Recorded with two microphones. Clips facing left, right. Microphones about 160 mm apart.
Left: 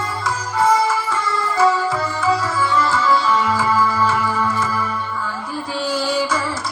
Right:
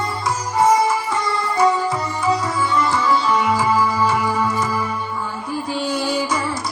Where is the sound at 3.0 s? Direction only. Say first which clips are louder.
Left 1 dB; 15° right (ahead or behind).